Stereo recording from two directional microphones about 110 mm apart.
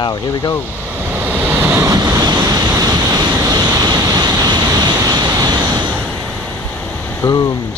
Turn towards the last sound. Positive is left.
turn(degrees=35)  # may be behind; listen again after turning